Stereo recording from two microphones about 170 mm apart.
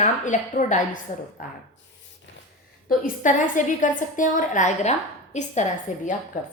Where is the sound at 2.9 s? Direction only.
50° left (ahead or behind).